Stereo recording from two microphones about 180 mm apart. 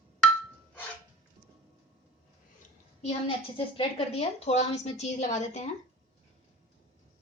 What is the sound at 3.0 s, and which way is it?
A woman's voice, 30° left (ahead or behind).